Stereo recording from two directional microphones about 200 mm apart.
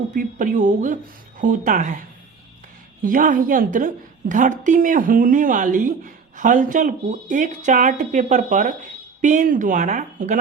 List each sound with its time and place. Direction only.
0.1 s a woman's voice: 40° right (ahead or behind)
3.0 s a woman's voice: 45° right (ahead or behind)